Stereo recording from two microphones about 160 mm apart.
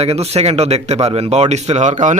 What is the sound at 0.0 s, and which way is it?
Speech, 40° right (ahead or behind).